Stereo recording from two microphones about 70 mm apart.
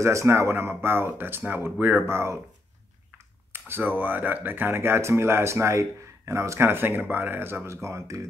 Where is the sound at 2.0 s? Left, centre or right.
Right.